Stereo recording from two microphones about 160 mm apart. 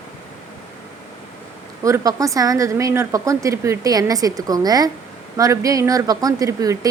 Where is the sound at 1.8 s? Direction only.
20° right (ahead or behind).